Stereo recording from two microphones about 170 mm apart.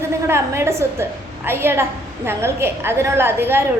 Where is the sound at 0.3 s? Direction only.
15° right (ahead or behind).